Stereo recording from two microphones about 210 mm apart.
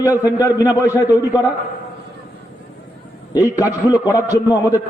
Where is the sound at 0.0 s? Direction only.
15° left (ahead or behind).